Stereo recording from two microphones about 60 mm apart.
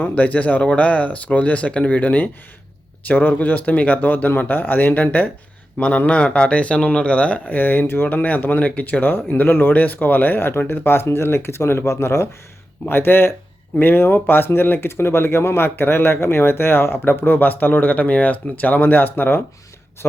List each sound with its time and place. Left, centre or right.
0.1 s speech: left